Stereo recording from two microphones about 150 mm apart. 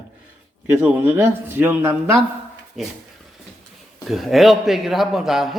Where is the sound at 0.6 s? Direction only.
15° right (ahead or behind).